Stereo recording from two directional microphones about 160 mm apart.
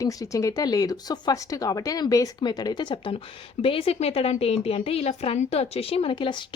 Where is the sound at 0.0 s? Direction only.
20° left (ahead or behind).